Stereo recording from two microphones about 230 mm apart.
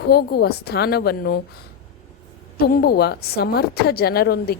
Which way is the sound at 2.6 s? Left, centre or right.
Left.